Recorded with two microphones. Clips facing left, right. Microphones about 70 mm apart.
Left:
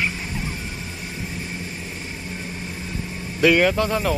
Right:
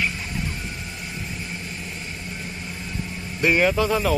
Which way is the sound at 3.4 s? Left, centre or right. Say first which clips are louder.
Left 3 dB; left.